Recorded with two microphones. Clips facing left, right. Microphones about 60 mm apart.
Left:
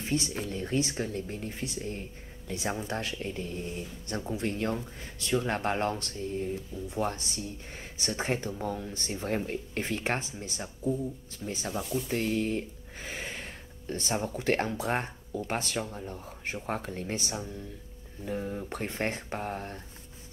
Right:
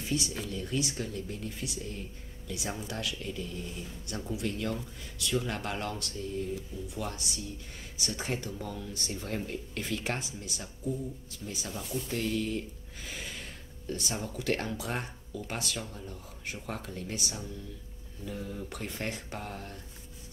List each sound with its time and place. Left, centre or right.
0.0 s speech: left